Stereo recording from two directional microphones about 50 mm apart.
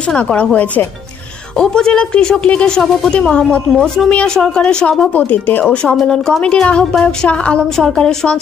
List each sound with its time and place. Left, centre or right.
0.1 s a woman's voice: left
5.1 s speech: left
6.0 s a woman's voice: centre
7.7 s a woman's voice: centre